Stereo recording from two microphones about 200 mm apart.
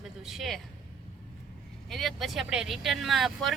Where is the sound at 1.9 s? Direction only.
Centre (ahead or behind).